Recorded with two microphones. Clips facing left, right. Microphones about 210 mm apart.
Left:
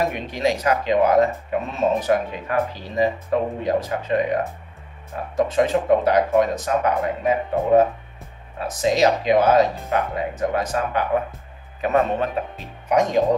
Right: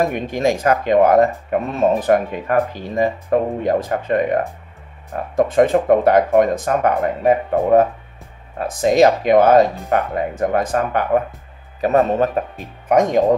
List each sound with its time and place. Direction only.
0.0 s speech: 50° right (ahead or behind)
5.3 s speech: 50° right (ahead or behind)
11.8 s speech: 40° right (ahead or behind)